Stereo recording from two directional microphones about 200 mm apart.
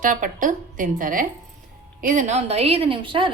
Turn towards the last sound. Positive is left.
turn(degrees=-25)  # may be behind; listen again after turning